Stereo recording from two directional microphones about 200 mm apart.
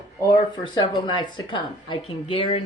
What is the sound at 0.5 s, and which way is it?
Speech, 20° left (ahead or behind).